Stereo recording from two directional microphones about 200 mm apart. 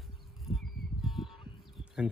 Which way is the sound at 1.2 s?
15° left (ahead or behind).